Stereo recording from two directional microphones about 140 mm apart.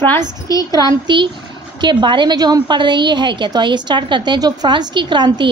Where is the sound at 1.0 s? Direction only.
35° right (ahead or behind).